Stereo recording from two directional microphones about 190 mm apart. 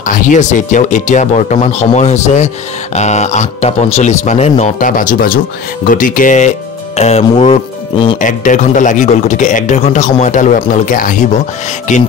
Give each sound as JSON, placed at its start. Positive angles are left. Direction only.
{"t": 0.0, "sound": "speech", "side_deg": 40}
{"t": 7.0, "sound": "music", "side_deg": 35}
{"t": 8.2, "sound": "speech", "side_deg": 40}